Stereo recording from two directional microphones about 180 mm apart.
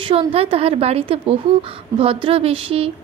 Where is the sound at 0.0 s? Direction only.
30° right (ahead or behind).